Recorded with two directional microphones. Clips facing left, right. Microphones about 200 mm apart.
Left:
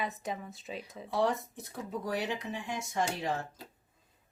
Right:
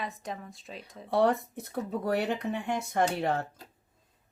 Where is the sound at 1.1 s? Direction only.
60° right (ahead or behind).